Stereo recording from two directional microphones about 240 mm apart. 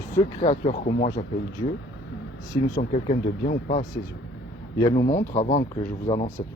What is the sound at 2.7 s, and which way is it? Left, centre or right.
Speech, left.